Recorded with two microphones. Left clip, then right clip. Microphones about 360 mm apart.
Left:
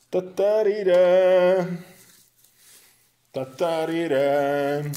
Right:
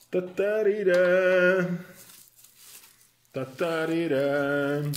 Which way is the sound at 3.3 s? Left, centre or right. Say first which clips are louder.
Left 4 dB; left.